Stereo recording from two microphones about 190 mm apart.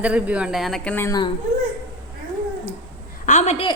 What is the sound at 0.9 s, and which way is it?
Speech, 15° left (ahead or behind).